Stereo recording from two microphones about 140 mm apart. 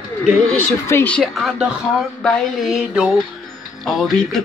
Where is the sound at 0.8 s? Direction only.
15° left (ahead or behind).